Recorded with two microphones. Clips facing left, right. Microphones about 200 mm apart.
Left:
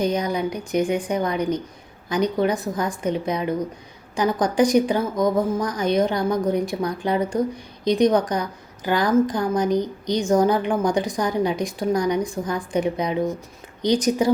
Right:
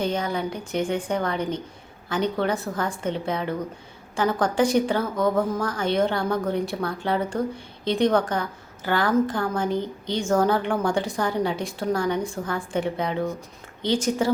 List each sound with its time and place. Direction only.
0.0 s a woman's voice: 15° left (ahead or behind)